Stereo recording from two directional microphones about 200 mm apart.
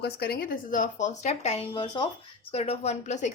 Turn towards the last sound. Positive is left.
turn(degrees=35)  # may be behind; listen again after turning